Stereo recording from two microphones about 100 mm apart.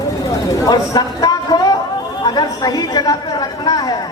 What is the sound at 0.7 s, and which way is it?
A man's voice, 40° left (ahead or behind).